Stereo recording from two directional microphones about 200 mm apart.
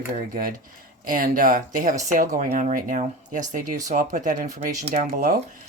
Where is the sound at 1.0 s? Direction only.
45° right (ahead or behind).